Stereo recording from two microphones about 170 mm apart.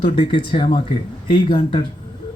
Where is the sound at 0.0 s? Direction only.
30° left (ahead or behind).